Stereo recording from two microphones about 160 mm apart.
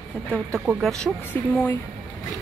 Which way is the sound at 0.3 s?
10° right (ahead or behind).